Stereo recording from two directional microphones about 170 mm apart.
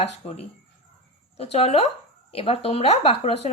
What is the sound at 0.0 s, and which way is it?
A woman's voice, 35° left (ahead or behind).